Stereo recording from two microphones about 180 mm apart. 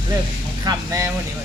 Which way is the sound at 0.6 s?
20° right (ahead or behind).